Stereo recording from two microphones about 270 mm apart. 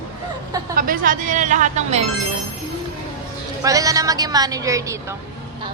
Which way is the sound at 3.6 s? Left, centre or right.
Centre.